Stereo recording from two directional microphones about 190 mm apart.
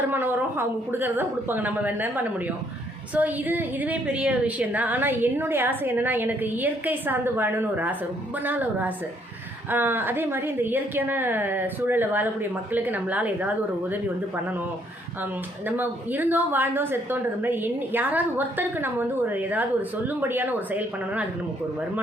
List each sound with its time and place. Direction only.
0.1 s a woman's voice: 10° right (ahead or behind)
15.2 s a woman's voice: 10° right (ahead or behind)